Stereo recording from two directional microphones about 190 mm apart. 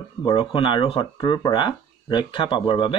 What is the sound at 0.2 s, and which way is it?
Speech, 30° left (ahead or behind).